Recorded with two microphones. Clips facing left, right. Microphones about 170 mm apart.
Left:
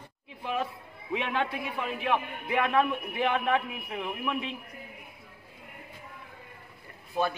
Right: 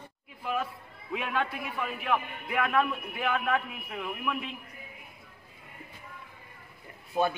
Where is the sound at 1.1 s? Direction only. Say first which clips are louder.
Left 2 dB; 25° left (ahead or behind).